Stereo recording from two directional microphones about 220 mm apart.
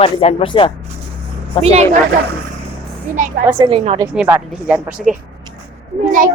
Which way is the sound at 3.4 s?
20° right (ahead or behind).